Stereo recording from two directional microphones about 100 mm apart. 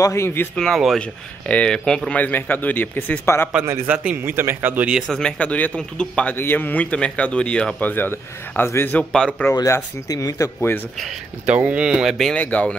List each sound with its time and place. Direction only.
0.0 s speech: 30° left (ahead or behind)
0.6 s speech: centre (ahead or behind)
1.4 s speech: 10° left (ahead or behind)
3.6 s speech: 20° right (ahead or behind)
5.1 s speech: 10° left (ahead or behind)
6.3 s speech: 20° left (ahead or behind)
9.1 s speech: 5° left (ahead or behind)
10.0 s speech: 35° left (ahead or behind)
11.4 s speech: 15° right (ahead or behind)
12.4 s speech: 15° left (ahead or behind)